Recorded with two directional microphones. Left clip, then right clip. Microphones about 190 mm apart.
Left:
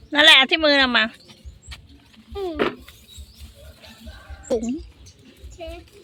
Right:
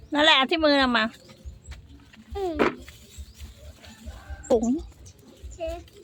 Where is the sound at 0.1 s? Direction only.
Centre (ahead or behind).